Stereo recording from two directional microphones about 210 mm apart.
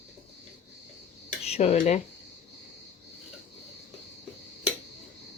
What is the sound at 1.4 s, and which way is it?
Speech, 30° left (ahead or behind).